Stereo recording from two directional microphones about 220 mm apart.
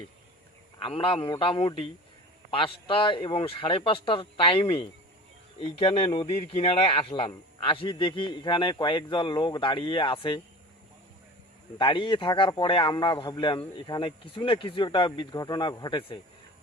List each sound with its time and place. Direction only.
0.8 s a man's voice: 25° left (ahead or behind)
11.8 s a man's voice: 20° left (ahead or behind)